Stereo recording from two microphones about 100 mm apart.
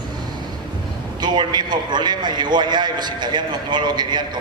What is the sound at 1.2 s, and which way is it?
A man's voice, 45° right (ahead or behind).